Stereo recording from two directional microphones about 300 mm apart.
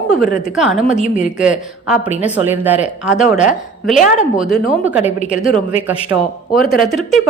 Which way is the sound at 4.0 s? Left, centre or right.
Left.